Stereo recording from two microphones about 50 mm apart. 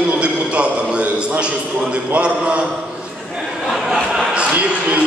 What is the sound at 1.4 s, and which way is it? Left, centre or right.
Speech, right.